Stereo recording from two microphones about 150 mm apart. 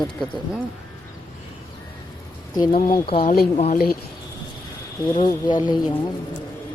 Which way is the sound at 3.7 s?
85° left.